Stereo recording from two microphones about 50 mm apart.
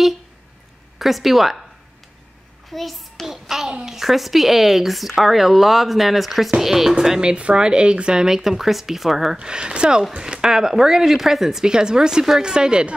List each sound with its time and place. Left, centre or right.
0.9 s speech: centre
2.7 s child singing: centre
3.8 s speech: centre
9.4 s speech: centre